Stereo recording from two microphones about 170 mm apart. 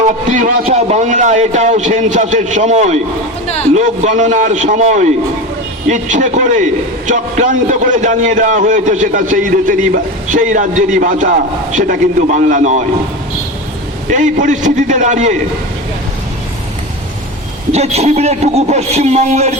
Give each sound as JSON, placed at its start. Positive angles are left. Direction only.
{"t": 0.3, "sound": "a man's voice", "side_deg": -50}
{"t": 14.1, "sound": "a man's voice", "side_deg": -45}
{"t": 17.7, "sound": "a man's voice", "side_deg": -40}